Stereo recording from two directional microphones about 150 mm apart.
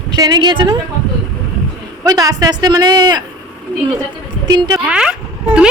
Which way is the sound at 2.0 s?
25° right (ahead or behind).